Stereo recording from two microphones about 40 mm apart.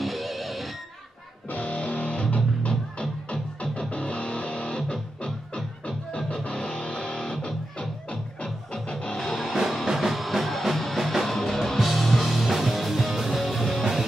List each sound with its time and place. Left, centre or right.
0.0 s music: centre
1.5 s music: left
9.2 s music: centre
11.3 s music: centre